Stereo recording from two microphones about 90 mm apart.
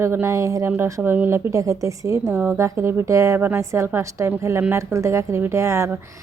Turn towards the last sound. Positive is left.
turn(degrees=-35)  # may be behind; listen again after turning